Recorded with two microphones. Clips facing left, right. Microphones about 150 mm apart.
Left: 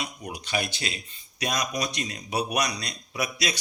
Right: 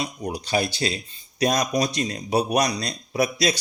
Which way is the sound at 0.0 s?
35° right (ahead or behind).